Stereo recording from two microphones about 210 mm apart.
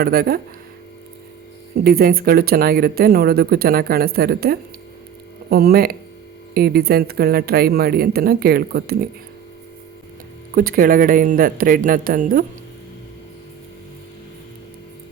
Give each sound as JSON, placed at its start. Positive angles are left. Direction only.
{"t": 0.0, "sound": "speech", "side_deg": -45}
{"t": 1.8, "sound": "speech", "side_deg": -45}
{"t": 10.5, "sound": "speech", "side_deg": -40}